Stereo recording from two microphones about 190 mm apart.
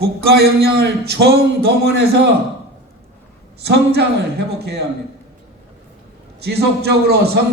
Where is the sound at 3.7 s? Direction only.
60° right (ahead or behind).